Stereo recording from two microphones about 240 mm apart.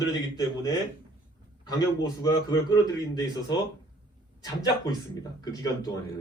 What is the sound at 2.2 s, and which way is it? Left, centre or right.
Speech, centre.